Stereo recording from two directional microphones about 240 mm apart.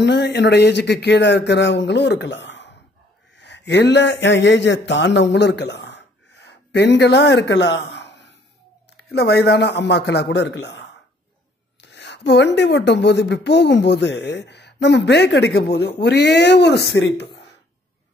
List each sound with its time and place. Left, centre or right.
0.0 s speech: left